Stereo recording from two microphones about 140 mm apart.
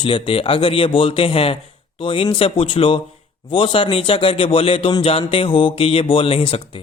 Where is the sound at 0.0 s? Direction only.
40° left (ahead or behind).